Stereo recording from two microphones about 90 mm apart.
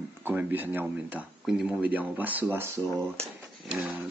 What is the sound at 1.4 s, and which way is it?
Speech, 5° right (ahead or behind).